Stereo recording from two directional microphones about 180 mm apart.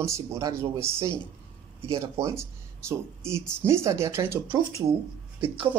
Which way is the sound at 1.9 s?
15° right (ahead or behind).